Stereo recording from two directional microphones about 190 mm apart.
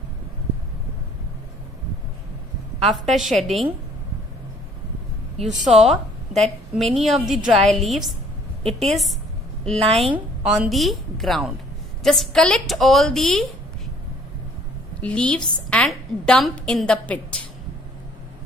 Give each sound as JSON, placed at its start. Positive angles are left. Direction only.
{"t": 2.8, "sound": "a woman's voice", "side_deg": 0}
{"t": 5.4, "sound": "a woman's voice", "side_deg": 0}
{"t": 9.8, "sound": "a woman's voice", "side_deg": -30}
{"t": 10.4, "sound": "a woman's voice", "side_deg": 0}
{"t": 15.0, "sound": "a woman's voice", "side_deg": 5}